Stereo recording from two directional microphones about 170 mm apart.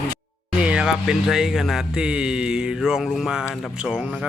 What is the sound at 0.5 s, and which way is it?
Speech, 5° right (ahead or behind).